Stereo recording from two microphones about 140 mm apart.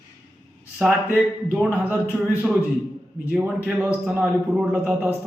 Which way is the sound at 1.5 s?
10° right (ahead or behind).